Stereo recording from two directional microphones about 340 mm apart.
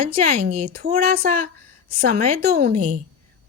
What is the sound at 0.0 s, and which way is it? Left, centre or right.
A woman's voice, right.